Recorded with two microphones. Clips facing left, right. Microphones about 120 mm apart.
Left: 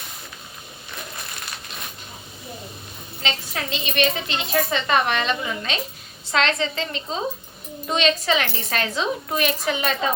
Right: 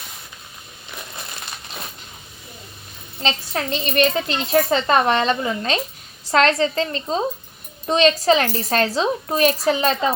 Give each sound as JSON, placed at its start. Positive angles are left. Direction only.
{"t": 3.2, "sound": "speech", "side_deg": -40}